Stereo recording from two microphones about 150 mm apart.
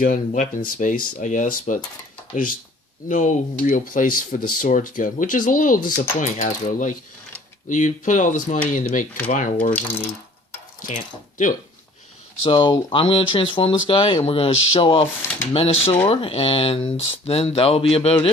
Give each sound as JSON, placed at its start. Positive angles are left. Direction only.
{"t": 0.0, "sound": "speech", "side_deg": 60}
{"t": 3.1, "sound": "speech", "side_deg": 60}
{"t": 10.8, "sound": "speech", "side_deg": 60}
{"t": 12.4, "sound": "speech", "side_deg": 35}